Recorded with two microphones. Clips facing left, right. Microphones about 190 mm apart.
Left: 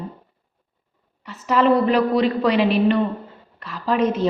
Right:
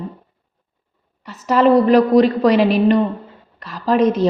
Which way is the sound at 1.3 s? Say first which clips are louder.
Right 4 dB; 40° right (ahead or behind).